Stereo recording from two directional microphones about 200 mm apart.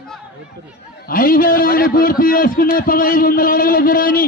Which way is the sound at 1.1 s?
45° left (ahead or behind).